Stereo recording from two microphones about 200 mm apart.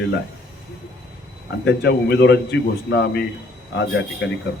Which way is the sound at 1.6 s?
60° left (ahead or behind).